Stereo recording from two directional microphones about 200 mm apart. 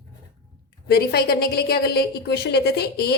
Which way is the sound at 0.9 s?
50° left (ahead or behind).